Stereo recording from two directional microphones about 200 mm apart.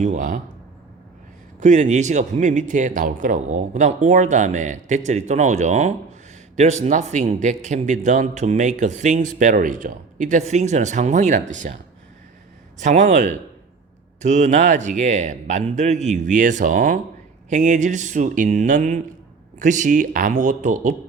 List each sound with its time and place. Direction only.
0.0 s a man's voice: 40° right (ahead or behind)
1.6 s a man's voice: 35° right (ahead or behind)
12.8 s a man's voice: 35° right (ahead or behind)